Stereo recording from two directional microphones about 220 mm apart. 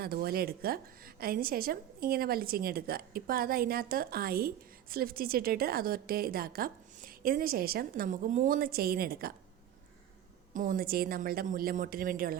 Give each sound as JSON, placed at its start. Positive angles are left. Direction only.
{"t": 0.0, "sound": "a woman's voice", "side_deg": -45}
{"t": 10.5, "sound": "a woman's voice", "side_deg": -40}